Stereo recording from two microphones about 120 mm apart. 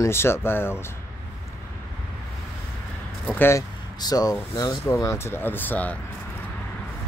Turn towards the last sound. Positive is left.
turn(degrees=15)  # may be behind; listen again after turning